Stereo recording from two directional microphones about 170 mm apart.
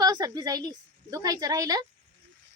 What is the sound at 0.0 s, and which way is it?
A woman's voice, 25° right (ahead or behind).